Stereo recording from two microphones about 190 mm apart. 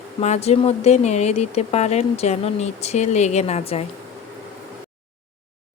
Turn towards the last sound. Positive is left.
turn(degrees=30)  # may be behind; listen again after turning